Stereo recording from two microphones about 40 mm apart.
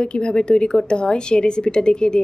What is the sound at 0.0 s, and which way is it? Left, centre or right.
A woman's voice, left.